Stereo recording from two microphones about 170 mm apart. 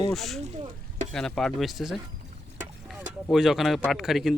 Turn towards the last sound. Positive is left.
turn(degrees=0)  # may be behind; listen again after turning